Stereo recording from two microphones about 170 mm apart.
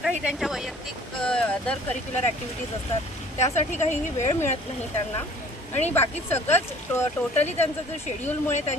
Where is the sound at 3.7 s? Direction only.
40° left (ahead or behind).